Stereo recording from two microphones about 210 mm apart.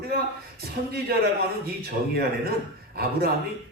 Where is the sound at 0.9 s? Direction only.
45° right (ahead or behind).